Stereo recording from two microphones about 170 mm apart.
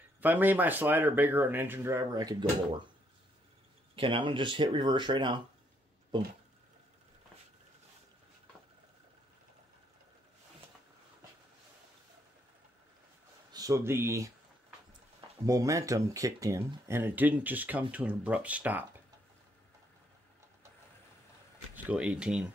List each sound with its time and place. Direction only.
0.2 s speech: 10° right (ahead or behind)
3.9 s speech: 30° right (ahead or behind)
13.5 s speech: 20° right (ahead or behind)
21.8 s speech: 5° right (ahead or behind)